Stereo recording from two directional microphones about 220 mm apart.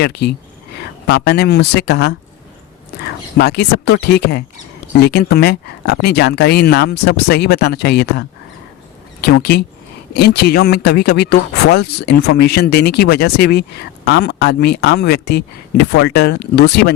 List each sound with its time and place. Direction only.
0.0 s speech: 50° left (ahead or behind)
3.3 s speech: 45° left (ahead or behind)
9.2 s speech: 50° left (ahead or behind)